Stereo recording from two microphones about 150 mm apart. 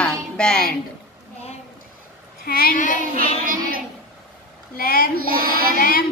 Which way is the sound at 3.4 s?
70° right (ahead or behind).